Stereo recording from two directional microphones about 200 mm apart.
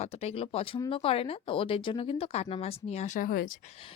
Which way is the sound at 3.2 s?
45° left (ahead or behind).